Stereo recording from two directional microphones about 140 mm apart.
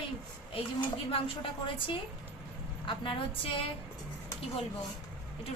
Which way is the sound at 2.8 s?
35° left (ahead or behind).